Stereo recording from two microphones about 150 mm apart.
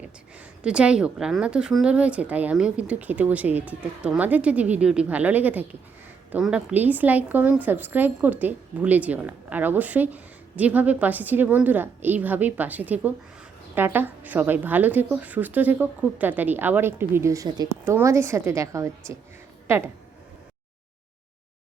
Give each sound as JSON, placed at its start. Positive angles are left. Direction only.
{"t": 0.3, "sound": "a woman's voice", "side_deg": -5}